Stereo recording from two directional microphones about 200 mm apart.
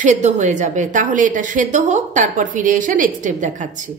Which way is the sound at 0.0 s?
35° right (ahead or behind).